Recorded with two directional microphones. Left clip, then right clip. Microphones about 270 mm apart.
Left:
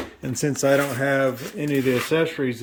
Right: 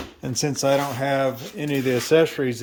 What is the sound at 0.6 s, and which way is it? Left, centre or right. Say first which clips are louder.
Speech: left 2 dB; centre.